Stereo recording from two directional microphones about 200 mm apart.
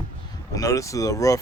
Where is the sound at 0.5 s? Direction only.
15° left (ahead or behind).